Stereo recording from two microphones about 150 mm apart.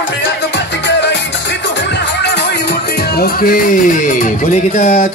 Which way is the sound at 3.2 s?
75° left (ahead or behind).